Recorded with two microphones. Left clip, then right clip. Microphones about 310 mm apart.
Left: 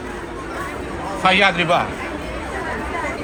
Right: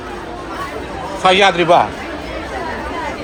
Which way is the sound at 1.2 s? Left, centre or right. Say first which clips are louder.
Right 4 dB; centre.